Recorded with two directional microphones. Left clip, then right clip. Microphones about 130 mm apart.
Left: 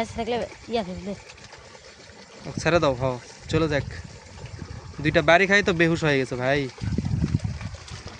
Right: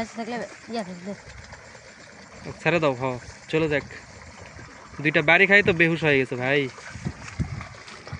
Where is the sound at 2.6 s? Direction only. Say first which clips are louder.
Left 1 dB; 35° left (ahead or behind).